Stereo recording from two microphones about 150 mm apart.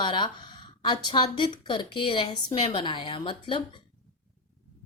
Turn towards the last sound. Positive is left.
turn(degrees=35)  # may be behind; listen again after turning